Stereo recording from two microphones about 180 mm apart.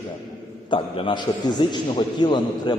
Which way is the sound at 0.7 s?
25° left (ahead or behind).